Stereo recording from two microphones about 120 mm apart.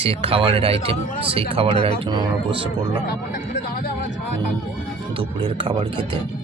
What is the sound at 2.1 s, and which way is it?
Speech, 35° right (ahead or behind).